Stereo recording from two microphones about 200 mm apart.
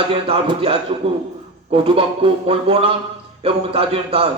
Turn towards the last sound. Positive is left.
turn(degrees=-30)  # may be behind; listen again after turning